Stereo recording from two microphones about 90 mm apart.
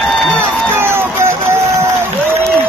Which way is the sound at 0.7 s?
30° right (ahead or behind).